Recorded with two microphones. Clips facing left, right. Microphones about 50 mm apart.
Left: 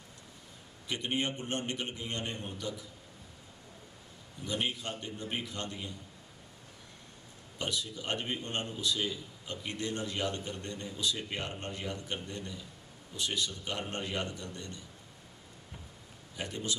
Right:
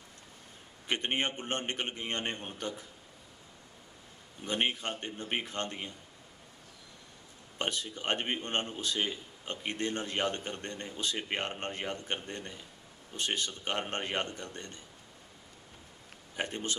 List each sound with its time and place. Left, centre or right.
0.8 s a man's voice: right
4.5 s a man's voice: right
7.5 s a man's voice: right
16.3 s a man's voice: right